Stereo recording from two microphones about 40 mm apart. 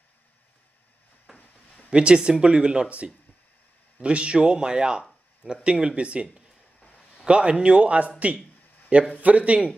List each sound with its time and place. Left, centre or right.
1.3 s a sound: centre
1.9 s speech: right
4.0 s speech: right
7.2 s speech: right
9.2 s speech: right